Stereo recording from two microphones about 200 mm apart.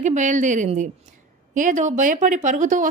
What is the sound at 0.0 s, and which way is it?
Speech, 40° right (ahead or behind).